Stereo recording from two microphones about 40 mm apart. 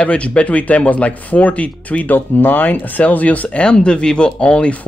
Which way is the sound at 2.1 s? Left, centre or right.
Left.